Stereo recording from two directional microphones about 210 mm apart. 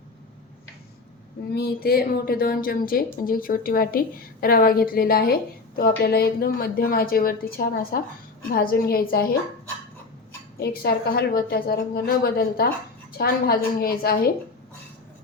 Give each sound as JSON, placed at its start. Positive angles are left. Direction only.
{"t": 1.5, "sound": "speech", "side_deg": 50}
{"t": 10.6, "sound": "speech", "side_deg": 50}